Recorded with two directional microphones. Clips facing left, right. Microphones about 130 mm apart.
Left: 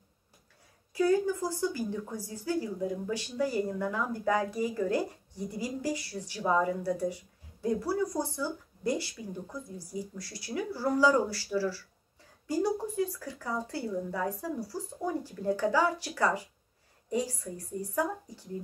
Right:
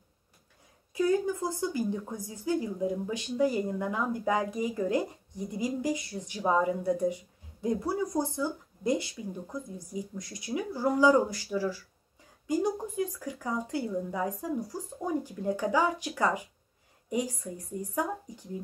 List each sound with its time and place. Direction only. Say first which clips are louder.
0.9 s a woman's voice: left 1 dB; 20° right (ahead or behind)